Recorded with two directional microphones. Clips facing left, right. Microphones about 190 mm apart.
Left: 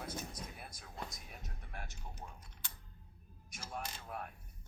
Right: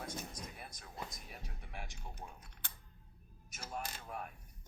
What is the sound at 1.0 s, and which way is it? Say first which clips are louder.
Music: even; 5° right (ahead or behind).